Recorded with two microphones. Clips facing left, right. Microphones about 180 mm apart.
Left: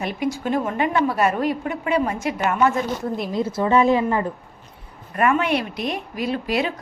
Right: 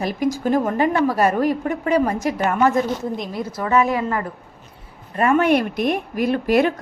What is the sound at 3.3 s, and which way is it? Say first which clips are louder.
Speech: left 1 dB; 25° left (ahead or behind).